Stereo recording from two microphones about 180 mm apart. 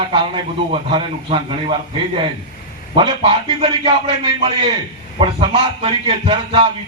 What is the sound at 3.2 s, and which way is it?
Speech, 30° right (ahead or behind).